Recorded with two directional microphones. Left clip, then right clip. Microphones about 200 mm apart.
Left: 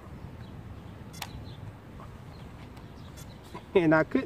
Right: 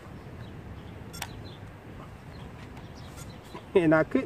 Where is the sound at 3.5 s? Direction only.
Centre (ahead or behind).